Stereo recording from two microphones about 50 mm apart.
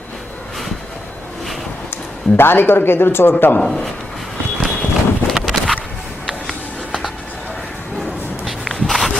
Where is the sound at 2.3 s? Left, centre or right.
Left.